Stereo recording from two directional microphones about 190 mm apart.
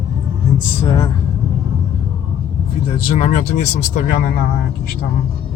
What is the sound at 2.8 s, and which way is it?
Speech, 35° left (ahead or behind).